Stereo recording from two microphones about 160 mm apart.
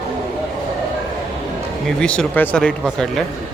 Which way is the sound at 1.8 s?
5° left (ahead or behind).